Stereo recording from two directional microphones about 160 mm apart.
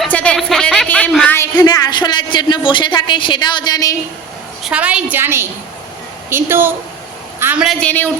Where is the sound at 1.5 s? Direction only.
25° left (ahead or behind).